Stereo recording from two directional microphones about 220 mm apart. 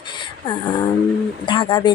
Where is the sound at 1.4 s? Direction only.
20° left (ahead or behind).